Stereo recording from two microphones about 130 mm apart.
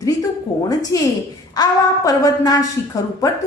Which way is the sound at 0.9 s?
25° left (ahead or behind).